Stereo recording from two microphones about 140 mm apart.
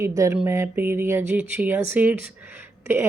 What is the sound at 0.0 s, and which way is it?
Speech, 20° right (ahead or behind).